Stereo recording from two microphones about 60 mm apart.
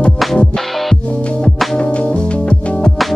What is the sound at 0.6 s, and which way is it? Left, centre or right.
Music, centre.